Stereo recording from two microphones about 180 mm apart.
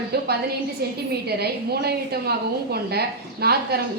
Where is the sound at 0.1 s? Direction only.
65° right (ahead or behind).